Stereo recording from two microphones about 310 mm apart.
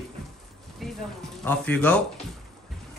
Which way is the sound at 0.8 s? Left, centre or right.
Centre.